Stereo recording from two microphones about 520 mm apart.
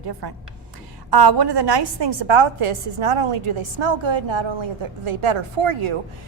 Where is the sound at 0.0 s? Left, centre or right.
Right.